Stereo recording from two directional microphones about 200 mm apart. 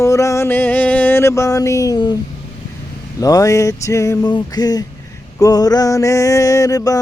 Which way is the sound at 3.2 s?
20° left (ahead or behind).